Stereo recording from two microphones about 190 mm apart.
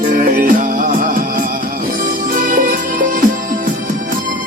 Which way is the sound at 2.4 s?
45° right (ahead or behind).